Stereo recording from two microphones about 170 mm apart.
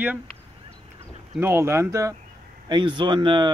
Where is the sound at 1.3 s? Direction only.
15° right (ahead or behind).